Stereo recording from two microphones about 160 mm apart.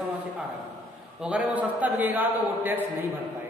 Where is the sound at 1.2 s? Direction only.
5° right (ahead or behind).